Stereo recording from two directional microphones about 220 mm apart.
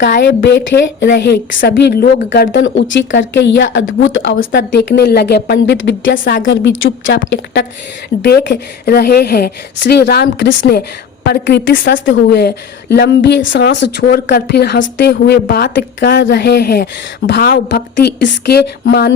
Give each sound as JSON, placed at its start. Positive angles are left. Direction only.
{"t": 0.1, "sound": "a woman's voice", "side_deg": 50}